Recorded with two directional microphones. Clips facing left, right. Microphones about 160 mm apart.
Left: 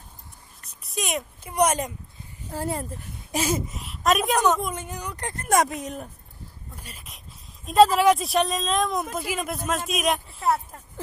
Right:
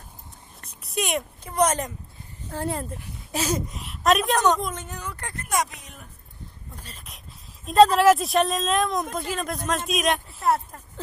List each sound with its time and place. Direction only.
0.7 s a sound: centre (ahead or behind)
1.5 s a woman's voice: 10° left (ahead or behind)
5.4 s speech: 50° left (ahead or behind)
7.6 s speech: centre (ahead or behind)